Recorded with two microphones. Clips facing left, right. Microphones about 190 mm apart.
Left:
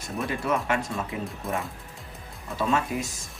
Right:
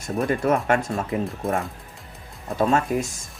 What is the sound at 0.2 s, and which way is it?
Speech, 50° right (ahead or behind).